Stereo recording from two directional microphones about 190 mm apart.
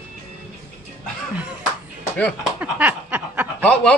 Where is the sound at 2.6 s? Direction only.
10° right (ahead or behind).